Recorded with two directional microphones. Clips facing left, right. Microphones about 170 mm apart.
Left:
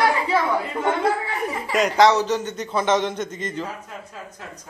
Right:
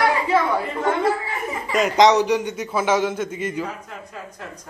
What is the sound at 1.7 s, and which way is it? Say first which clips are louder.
Speech: right 1 dB; centre (ahead or behind).